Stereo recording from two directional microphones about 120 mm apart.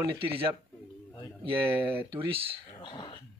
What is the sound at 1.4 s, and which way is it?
Speech, 45° right (ahead or behind).